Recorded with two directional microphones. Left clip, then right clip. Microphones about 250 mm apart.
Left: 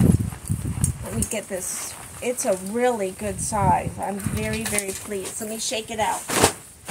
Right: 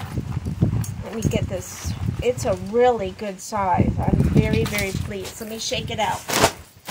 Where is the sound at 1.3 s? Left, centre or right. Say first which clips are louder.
Right 1 dB; centre.